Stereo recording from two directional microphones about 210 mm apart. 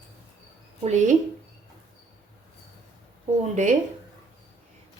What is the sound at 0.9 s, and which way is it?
Speech, 35° right (ahead or behind).